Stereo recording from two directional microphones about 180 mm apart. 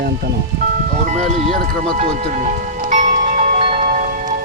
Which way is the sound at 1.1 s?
40° right (ahead or behind).